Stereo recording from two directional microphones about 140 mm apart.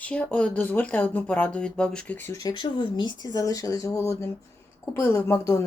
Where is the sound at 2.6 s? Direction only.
30° left (ahead or behind).